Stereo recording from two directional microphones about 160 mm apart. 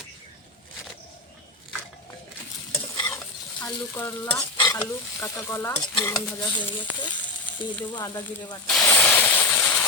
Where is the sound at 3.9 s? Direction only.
15° left (ahead or behind).